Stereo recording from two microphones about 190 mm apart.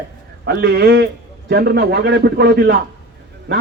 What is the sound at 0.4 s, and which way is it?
A man's voice, 60° right (ahead or behind).